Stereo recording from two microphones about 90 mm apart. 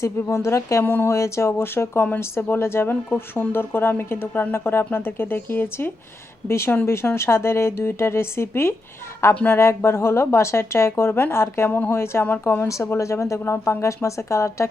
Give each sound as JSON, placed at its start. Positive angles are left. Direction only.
{"t": 0.0, "sound": "speech", "side_deg": 30}
{"t": 9.6, "sound": "speech", "side_deg": 30}